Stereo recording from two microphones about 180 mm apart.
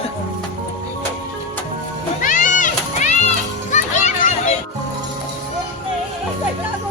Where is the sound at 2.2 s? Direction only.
45° left (ahead or behind).